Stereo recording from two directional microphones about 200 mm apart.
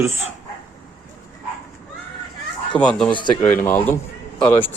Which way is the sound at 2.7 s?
5° left (ahead or behind).